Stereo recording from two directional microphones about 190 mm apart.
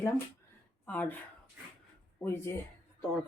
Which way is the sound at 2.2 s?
10° left (ahead or behind).